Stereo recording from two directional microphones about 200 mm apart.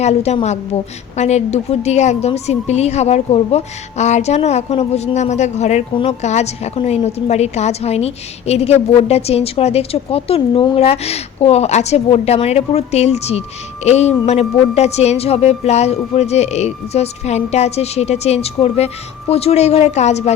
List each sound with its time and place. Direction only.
0.0 s a woman's voice: 35° left (ahead or behind)